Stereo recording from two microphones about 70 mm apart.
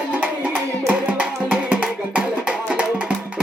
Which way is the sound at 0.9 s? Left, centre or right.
Centre.